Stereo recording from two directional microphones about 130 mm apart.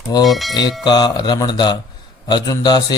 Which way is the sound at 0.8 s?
35° left (ahead or behind).